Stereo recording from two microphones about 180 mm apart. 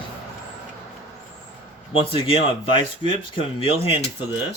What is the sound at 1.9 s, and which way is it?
Speech, 30° left (ahead or behind).